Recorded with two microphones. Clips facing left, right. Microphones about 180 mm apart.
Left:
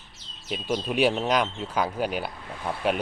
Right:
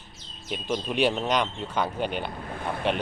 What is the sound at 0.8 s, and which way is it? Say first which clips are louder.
Speech: left 2 dB; 5° left (ahead or behind).